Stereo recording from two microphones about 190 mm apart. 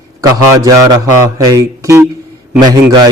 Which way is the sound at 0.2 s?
20° right (ahead or behind).